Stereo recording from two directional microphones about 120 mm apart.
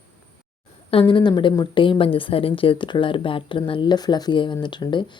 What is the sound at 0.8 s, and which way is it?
A woman's voice, 45° left (ahead or behind).